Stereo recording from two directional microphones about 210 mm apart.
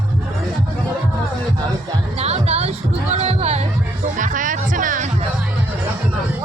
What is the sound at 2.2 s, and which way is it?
Music, 30° right (ahead or behind).